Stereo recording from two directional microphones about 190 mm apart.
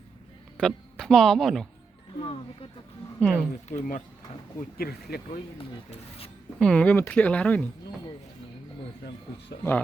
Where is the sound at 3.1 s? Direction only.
5° left (ahead or behind).